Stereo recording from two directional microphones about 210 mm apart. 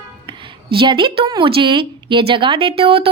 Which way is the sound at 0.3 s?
25° right (ahead or behind).